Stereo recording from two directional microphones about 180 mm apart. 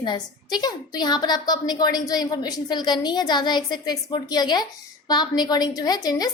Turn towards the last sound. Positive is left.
turn(degrees=20)  # may be behind; listen again after turning